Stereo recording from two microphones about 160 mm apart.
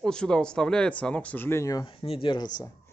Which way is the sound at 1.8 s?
35° left (ahead or behind).